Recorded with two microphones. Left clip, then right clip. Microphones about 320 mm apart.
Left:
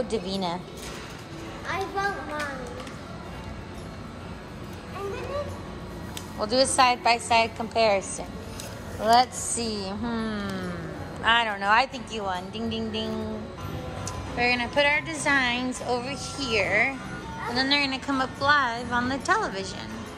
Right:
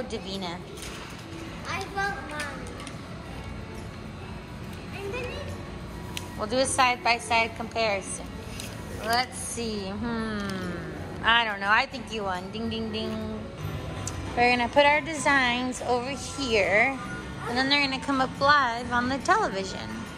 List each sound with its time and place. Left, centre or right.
0.1 s a woman's voice: centre
1.7 s a child's voice: left
6.5 s a woman's voice: centre
9.0 s a woman's voice: centre
14.3 s a woman's voice: centre